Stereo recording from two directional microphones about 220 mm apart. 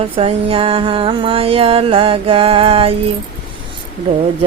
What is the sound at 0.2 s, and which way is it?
Mantra, 25° right (ahead or behind).